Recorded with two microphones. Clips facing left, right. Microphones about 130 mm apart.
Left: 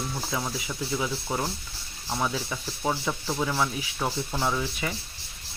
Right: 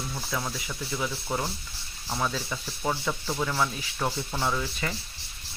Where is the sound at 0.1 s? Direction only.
10° left (ahead or behind).